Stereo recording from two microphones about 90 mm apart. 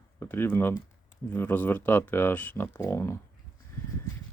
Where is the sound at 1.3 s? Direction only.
20° left (ahead or behind).